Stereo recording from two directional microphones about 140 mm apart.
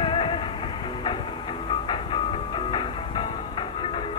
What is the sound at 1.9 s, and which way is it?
Music, 35° left (ahead or behind).